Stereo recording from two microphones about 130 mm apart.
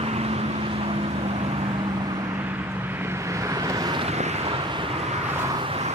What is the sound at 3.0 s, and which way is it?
Vehicle, 20° right (ahead or behind).